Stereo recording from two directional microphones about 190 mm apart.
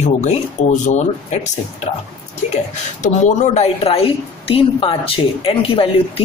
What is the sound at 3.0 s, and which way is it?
A woman's voice, 40° left (ahead or behind).